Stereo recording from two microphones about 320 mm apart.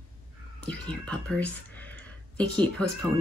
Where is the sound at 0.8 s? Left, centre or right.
Centre.